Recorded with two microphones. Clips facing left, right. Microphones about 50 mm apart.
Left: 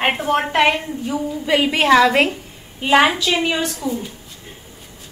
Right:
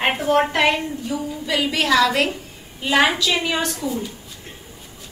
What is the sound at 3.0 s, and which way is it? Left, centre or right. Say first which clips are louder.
Speech: left 1 dB; centre.